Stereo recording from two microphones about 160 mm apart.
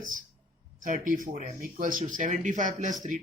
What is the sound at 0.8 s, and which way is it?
Speech, 55° right (ahead or behind).